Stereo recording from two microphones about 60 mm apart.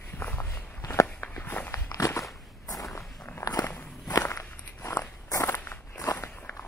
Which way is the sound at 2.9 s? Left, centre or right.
Left.